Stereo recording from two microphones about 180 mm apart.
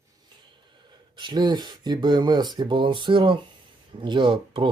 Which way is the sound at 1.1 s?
25° right (ahead or behind).